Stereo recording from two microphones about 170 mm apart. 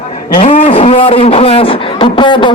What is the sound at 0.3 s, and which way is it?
A man's voice, 35° left (ahead or behind).